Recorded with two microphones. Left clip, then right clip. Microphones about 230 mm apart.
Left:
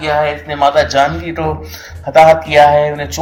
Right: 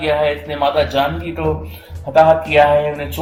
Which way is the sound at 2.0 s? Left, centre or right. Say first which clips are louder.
Left 4 dB; centre.